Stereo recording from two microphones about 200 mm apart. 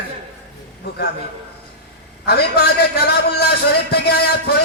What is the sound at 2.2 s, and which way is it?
A man's voice, 55° left (ahead or behind).